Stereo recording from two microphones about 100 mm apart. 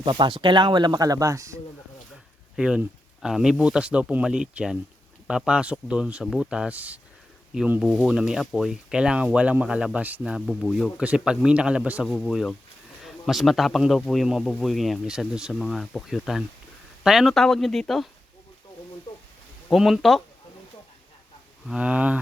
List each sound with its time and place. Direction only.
0.0 s speech: 50° right (ahead or behind); by 1.5 s 30° right (ahead or behind)
2.6 s speech: 5° right (ahead or behind)
8.0 s speech: 5° right (ahead or behind)
19.7 s speech: centre (ahead or behind)
21.7 s speech: 10° right (ahead or behind)